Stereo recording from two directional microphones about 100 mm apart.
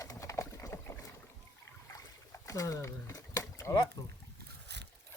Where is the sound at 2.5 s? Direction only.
35° left (ahead or behind).